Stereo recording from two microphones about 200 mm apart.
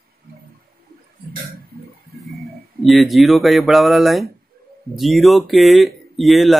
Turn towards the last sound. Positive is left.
turn(degrees=0)  # may be behind; listen again after turning